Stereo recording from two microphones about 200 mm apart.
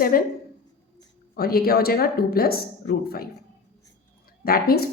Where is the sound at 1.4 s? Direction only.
50° left (ahead or behind).